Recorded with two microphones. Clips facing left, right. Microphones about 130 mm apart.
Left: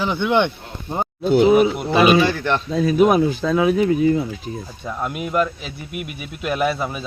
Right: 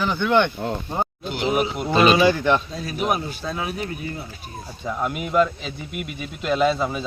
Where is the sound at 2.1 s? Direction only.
10° right (ahead or behind).